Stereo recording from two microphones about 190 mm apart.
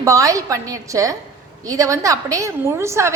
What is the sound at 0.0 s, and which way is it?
A woman's voice, 15° right (ahead or behind).